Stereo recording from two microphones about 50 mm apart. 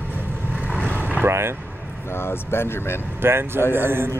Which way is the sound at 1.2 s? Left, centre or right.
Right.